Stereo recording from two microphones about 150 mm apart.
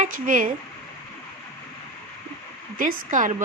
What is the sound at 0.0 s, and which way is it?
Speech, 65° right (ahead or behind).